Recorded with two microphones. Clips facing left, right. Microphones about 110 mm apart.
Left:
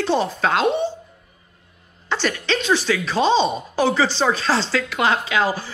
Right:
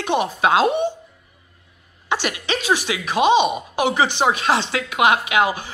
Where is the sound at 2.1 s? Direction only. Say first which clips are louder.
Left 1 dB; 10° right (ahead or behind).